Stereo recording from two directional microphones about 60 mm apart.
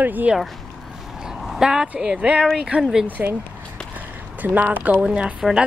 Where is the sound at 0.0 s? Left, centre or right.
Right.